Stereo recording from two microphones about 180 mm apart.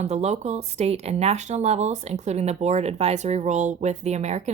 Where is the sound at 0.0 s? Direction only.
35° right (ahead or behind).